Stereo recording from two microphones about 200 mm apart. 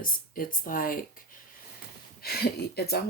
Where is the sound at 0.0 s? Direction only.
45° left (ahead or behind).